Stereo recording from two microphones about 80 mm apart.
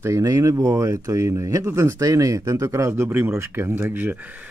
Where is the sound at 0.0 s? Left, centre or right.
Right.